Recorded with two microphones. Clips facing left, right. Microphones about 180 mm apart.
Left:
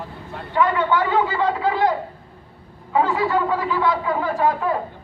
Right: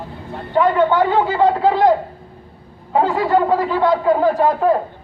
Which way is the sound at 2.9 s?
35° right (ahead or behind).